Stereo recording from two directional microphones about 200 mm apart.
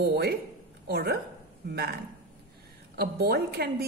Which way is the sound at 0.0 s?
55° right (ahead or behind).